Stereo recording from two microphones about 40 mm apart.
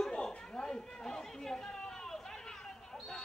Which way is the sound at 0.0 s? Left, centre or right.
Centre.